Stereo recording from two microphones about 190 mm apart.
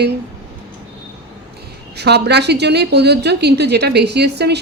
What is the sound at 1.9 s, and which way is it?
A woman's voice, 60° right (ahead or behind).